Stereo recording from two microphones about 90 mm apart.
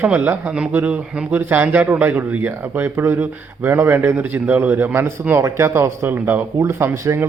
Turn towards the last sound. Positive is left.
turn(degrees=-30)  # may be behind; listen again after turning